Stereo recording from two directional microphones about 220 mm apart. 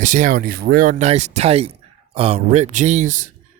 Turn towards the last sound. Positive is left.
turn(degrees=-35)  # may be behind; listen again after turning